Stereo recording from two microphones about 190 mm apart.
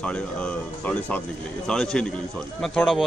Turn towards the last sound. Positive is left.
turn(degrees=0)  # may be behind; listen again after turning